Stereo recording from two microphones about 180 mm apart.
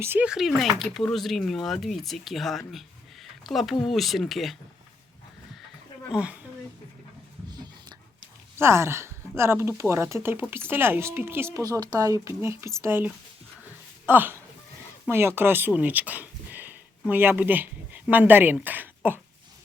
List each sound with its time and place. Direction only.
0.0 s speech: 10° right (ahead or behind)
6.1 s speech: 5° right (ahead or behind)
7.5 s a sound: 20° right (ahead or behind)
8.5 s speech: 15° right (ahead or behind)